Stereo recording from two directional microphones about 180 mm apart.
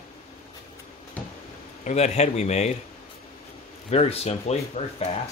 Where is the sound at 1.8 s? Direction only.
40° left (ahead or behind).